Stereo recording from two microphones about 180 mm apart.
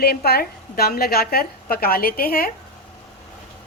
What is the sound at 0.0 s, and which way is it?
A woman's voice, 60° left (ahead or behind).